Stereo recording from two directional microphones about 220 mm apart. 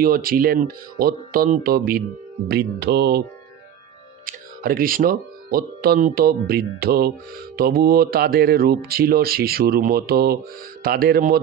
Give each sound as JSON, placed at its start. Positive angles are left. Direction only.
{"t": 0.0, "sound": "speech", "side_deg": -40}
{"t": 4.3, "sound": "speech", "side_deg": -40}